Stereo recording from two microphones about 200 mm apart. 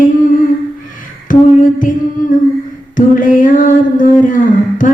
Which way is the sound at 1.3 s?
40° left (ahead or behind).